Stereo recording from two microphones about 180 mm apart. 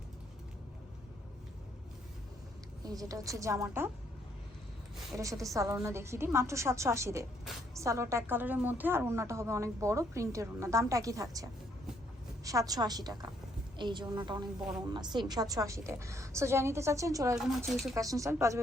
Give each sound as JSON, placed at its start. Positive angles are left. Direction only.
{"t": 2.8, "sound": "a woman's voice", "side_deg": -20}
{"t": 5.1, "sound": "a woman's voice", "side_deg": -20}
{"t": 12.5, "sound": "a woman's voice", "side_deg": -20}
{"t": 17.3, "sound": "speech", "side_deg": 0}
{"t": 17.9, "sound": "a woman's voice", "side_deg": -20}